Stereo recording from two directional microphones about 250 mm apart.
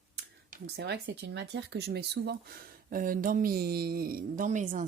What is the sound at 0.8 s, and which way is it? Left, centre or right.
A woman's voice, right.